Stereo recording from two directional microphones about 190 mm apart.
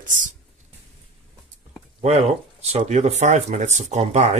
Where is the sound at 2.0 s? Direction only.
35° right (ahead or behind).